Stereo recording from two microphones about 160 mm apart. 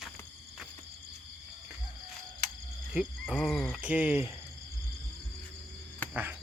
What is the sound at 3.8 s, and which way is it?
Speech, 10° right (ahead or behind).